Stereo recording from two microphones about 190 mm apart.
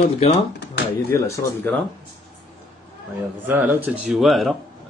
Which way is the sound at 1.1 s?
15° left (ahead or behind).